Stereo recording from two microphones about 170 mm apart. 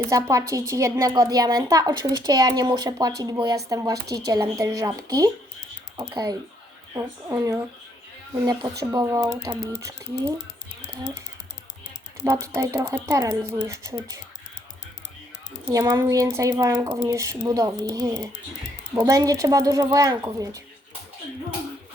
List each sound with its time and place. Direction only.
0.1 s a woman's voice: 20° right (ahead or behind)
8.9 s a woman's voice: 20° right (ahead or behind)
12.2 s speech: 15° right (ahead or behind)
15.7 s a woman's voice: 20° right (ahead or behind)